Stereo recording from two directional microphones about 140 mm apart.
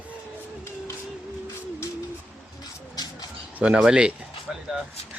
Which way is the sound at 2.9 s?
30° left (ahead or behind).